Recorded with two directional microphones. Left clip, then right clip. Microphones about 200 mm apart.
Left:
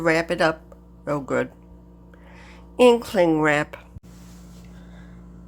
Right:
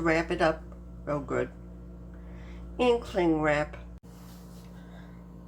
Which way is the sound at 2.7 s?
55° left (ahead or behind).